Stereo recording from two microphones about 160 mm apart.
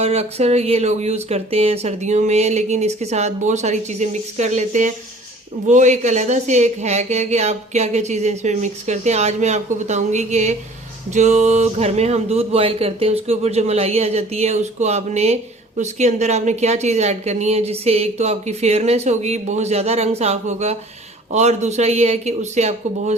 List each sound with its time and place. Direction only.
0.0 s a woman's voice: 40° right (ahead or behind)